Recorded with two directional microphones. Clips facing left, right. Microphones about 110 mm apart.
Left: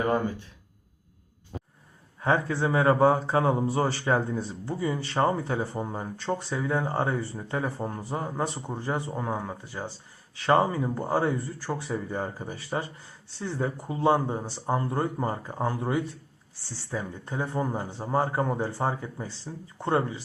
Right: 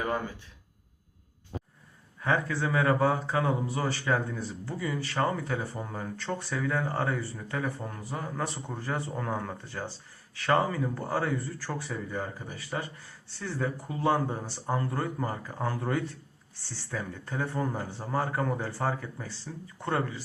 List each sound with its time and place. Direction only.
2.2 s speech: 25° left (ahead or behind); by 9.9 s 10° left (ahead or behind)
10.3 s speech: 25° left (ahead or behind)